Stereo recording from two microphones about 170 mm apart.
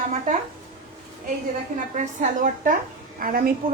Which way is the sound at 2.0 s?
50° right (ahead or behind).